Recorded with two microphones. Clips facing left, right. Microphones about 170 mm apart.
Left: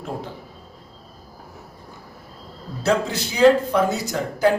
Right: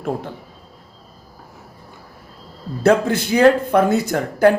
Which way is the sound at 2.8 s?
55° right (ahead or behind).